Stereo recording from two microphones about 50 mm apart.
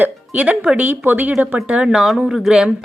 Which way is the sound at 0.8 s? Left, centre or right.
Right.